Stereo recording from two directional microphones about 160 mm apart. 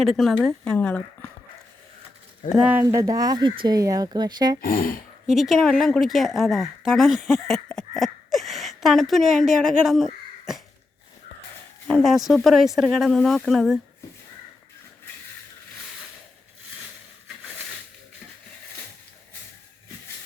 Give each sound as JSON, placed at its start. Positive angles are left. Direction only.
{"t": 0.0, "sound": "speech", "side_deg": 0}
{"t": 2.5, "sound": "speech", "side_deg": -5}
{"t": 4.6, "sound": "speech", "side_deg": 65}
{"t": 5.2, "sound": "a woman's voice", "side_deg": 0}
{"t": 11.9, "sound": "speech", "side_deg": 5}